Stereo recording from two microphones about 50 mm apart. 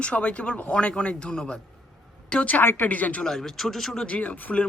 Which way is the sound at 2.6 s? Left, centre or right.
Left.